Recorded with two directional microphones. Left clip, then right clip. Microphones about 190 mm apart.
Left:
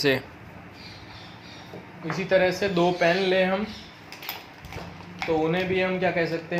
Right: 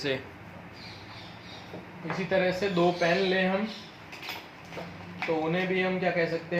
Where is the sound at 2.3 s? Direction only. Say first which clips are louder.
Left 5 dB; 60° left (ahead or behind).